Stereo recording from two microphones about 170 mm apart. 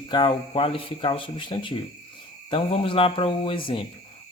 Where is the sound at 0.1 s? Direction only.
25° left (ahead or behind).